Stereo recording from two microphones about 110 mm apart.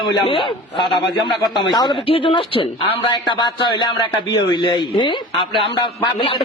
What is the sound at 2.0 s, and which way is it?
A man's voice, 55° left (ahead or behind).